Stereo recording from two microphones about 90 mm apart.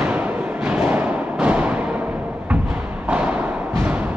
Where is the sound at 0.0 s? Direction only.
15° right (ahead or behind).